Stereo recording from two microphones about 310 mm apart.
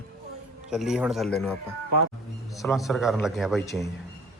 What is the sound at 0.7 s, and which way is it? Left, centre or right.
Speech, centre.